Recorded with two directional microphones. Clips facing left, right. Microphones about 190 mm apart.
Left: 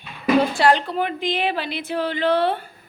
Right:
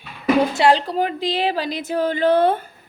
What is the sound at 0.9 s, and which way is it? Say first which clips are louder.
A woman's voice: right 2 dB; 35° right (ahead or behind).